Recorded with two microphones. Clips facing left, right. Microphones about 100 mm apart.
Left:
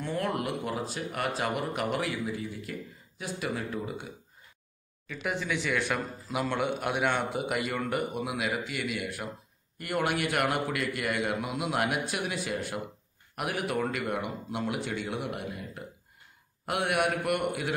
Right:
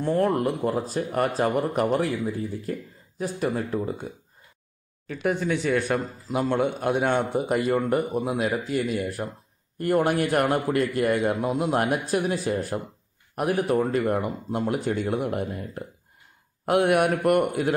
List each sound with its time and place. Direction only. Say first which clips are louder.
0.0 s a man's voice: right 8 dB; 35° right (ahead or behind)
5.9 s a man's voice: right 6 dB; 25° right (ahead or behind); by 17.7 s 45° right (ahead or behind)